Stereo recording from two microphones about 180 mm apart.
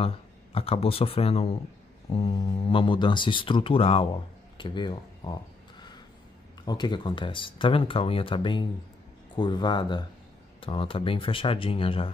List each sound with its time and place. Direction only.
0.6 s speech: 30° left (ahead or behind)
6.6 s speech: 25° left (ahead or behind)